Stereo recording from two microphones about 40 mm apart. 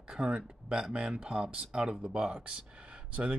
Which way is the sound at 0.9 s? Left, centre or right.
Right.